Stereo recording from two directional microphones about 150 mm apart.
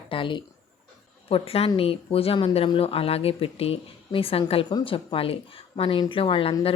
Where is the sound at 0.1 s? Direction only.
35° left (ahead or behind).